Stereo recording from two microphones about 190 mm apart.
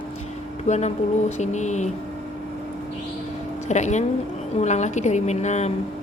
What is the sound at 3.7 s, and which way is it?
A woman's voice, 40° left (ahead or behind).